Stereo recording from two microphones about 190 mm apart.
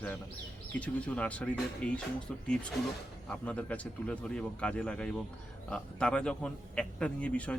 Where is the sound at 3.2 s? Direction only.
5° left (ahead or behind).